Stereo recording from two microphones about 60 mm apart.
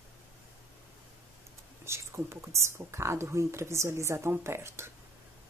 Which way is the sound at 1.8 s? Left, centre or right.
Right.